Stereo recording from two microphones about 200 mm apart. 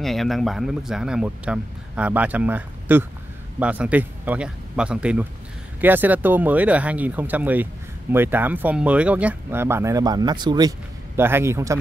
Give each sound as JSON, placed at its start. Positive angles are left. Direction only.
{"t": 0.0, "sound": "speech", "side_deg": 0}